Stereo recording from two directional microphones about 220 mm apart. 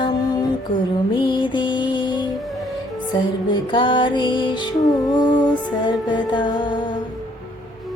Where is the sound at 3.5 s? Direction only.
20° left (ahead or behind).